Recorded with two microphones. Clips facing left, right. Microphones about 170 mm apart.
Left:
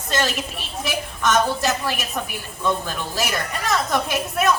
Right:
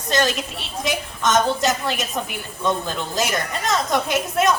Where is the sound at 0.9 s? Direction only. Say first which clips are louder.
Right 1 dB; 20° right (ahead or behind).